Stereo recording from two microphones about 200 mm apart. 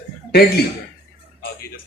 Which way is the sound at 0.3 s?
50° left (ahead or behind).